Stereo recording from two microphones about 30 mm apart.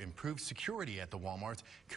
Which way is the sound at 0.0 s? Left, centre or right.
Centre.